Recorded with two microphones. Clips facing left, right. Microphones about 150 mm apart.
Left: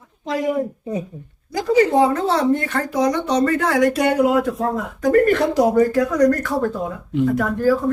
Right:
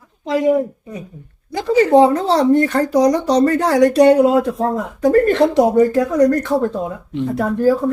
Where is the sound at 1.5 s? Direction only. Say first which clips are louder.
Right 4 dB; 30° right (ahead or behind).